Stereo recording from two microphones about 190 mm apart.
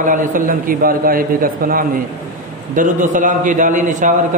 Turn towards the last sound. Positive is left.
turn(degrees=-40)  # may be behind; listen again after turning